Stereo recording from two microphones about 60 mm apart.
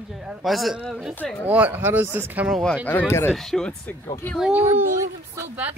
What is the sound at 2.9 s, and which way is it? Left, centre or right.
Speech, left.